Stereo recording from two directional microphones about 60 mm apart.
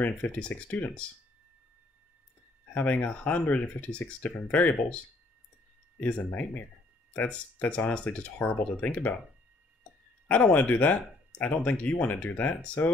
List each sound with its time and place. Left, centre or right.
0.0 s speech: left
2.7 s speech: left
5.9 s speech: left
10.2 s speech: left